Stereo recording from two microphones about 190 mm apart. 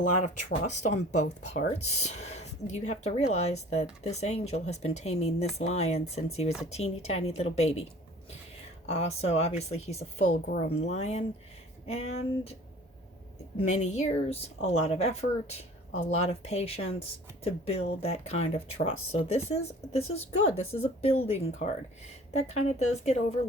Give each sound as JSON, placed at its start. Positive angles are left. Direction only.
{"t": 0.0, "sound": "speech", "side_deg": 40}
{"t": 8.9, "sound": "speech", "side_deg": 35}
{"t": 13.7, "sound": "speech", "side_deg": 35}